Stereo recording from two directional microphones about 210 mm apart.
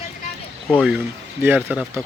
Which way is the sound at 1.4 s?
10° right (ahead or behind).